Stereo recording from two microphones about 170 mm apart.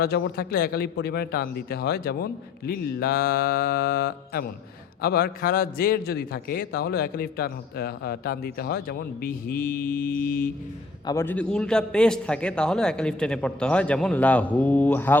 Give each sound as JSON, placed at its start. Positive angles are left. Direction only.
{"t": 0.0, "sound": "a man's voice", "side_deg": 65}
{"t": 11.0, "sound": "a man's voice", "side_deg": 15}